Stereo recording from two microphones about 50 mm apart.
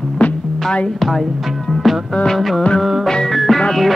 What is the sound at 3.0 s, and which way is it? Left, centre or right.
Music, centre.